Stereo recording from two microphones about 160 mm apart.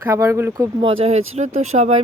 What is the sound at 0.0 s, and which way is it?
Speech, 15° right (ahead or behind).